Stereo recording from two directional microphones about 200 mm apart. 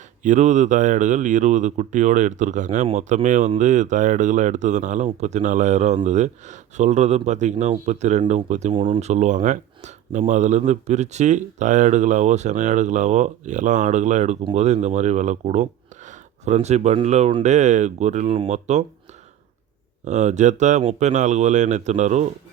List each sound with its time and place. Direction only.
0.2 s speech: 35° right (ahead or behind)
20.1 s speech: 35° right (ahead or behind)